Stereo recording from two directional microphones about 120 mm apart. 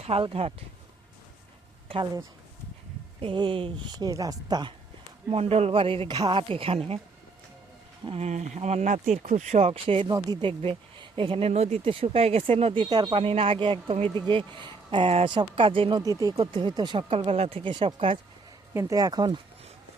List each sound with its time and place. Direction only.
0.0 s speech: 55° right (ahead or behind)
3.2 s speech: 45° right (ahead or behind)
3.9 s a woman's voice: 30° right (ahead or behind)
5.3 s speech: 55° right (ahead or behind)
8.0 s speech: 55° right (ahead or behind)
8.3 s speech: 75° right (ahead or behind)
9.7 s speech: 50° right (ahead or behind)
16.0 s speech: 30° right (ahead or behind)
16.4 s speech: 45° right (ahead or behind)
18.7 s a woman's voice: 25° right (ahead or behind)